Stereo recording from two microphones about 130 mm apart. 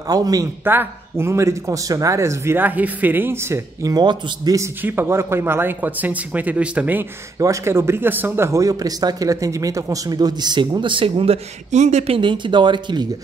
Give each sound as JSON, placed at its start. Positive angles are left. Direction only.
{"t": 0.1, "sound": "speech", "side_deg": -30}
{"t": 0.7, "sound": "speech", "side_deg": -15}
{"t": 4.6, "sound": "speech", "side_deg": -15}
{"t": 7.3, "sound": "speech", "side_deg": -25}
{"t": 11.7, "sound": "speech", "side_deg": -60}